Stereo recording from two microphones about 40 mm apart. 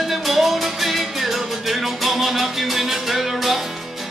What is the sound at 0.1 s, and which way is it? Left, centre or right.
Music, centre.